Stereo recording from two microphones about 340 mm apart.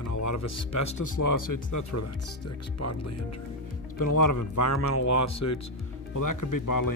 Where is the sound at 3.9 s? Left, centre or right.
Left.